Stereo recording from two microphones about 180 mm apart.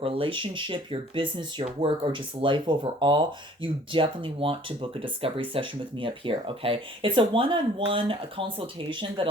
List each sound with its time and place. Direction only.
0.0 s speech: 30° right (ahead or behind)